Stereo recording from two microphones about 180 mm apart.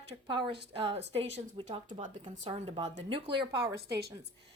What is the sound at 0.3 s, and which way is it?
Speech, 30° right (ahead or behind).